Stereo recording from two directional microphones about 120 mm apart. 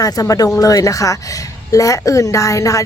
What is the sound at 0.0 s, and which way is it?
Speech, 30° left (ahead or behind).